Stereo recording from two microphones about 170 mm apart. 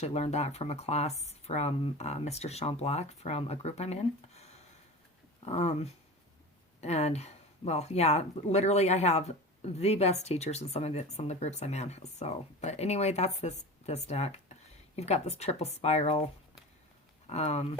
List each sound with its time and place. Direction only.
0.0 s speech: 40° left (ahead or behind)